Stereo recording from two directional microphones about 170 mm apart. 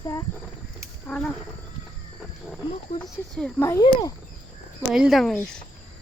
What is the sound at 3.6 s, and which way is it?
Speech, 15° left (ahead or behind).